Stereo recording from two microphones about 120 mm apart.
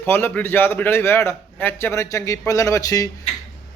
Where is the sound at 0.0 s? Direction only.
15° left (ahead or behind).